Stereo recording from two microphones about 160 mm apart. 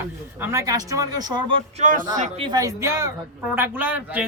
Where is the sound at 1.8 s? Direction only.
55° right (ahead or behind).